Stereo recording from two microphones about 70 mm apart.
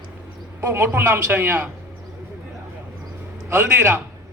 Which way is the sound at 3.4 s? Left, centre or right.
Right.